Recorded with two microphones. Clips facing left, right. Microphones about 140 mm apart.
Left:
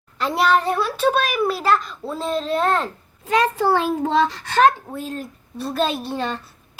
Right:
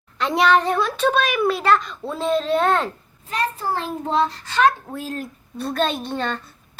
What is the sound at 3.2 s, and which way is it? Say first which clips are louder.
A child's voice: left 6 dB; 90° left.